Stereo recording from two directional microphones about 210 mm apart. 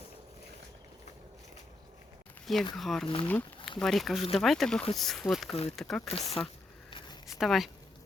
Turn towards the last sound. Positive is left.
turn(degrees=0)  # may be behind; listen again after turning